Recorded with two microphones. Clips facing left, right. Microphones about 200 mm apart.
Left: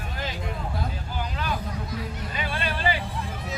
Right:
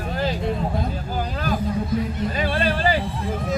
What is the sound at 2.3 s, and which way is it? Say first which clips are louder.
Speech: right 7 dB; 35° right (ahead or behind).